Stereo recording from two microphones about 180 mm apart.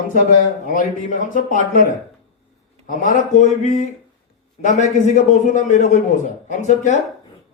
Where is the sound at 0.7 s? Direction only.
50° left (ahead or behind).